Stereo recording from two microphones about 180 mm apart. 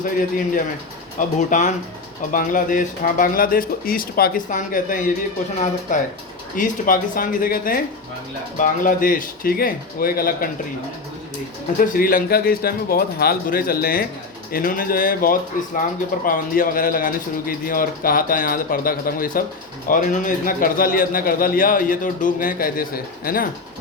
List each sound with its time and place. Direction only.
0.0 s a man's voice: 50° left (ahead or behind)
11.9 s a man's voice: 55° left (ahead or behind)